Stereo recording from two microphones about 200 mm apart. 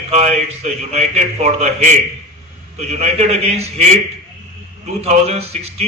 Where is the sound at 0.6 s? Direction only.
35° right (ahead or behind).